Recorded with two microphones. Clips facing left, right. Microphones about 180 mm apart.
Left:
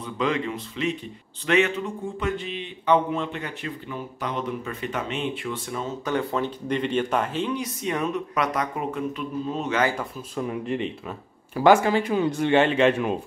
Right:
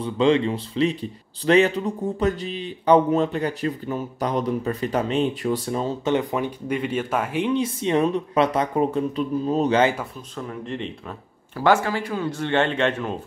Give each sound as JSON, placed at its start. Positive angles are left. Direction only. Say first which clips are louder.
{"t": 0.0, "sound": "speech", "louder": "right 7 dB", "side_deg": -30}
{"t": 6.0, "sound": "speech", "louder": "right 1 dB", "side_deg": -15}
{"t": 7.4, "sound": "speech", "louder": "right 5 dB", "side_deg": -25}
{"t": 10.3, "sound": "speech", "louder": "left 4 dB", "side_deg": 10}